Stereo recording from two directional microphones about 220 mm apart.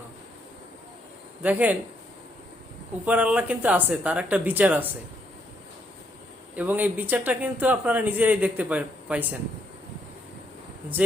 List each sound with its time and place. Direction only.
1.4 s speech: 5° right (ahead or behind)
3.1 s speech: 5° right (ahead or behind)
6.6 s speech: 10° right (ahead or behind)